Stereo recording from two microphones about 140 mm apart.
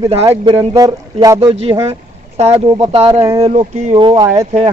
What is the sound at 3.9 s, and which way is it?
Speech, 35° right (ahead or behind).